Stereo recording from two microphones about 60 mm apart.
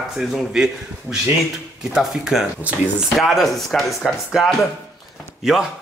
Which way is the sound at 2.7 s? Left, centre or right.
Right.